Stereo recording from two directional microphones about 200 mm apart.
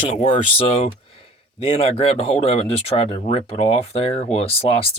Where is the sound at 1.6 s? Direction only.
30° left (ahead or behind).